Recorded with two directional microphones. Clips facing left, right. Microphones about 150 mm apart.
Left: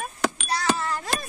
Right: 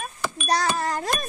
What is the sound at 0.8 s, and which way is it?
Speech, 40° right (ahead or behind).